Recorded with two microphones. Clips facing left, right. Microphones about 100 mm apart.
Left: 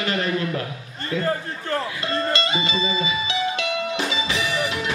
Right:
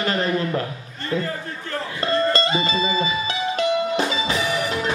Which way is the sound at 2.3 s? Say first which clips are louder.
Right 3 dB; 40° right (ahead or behind).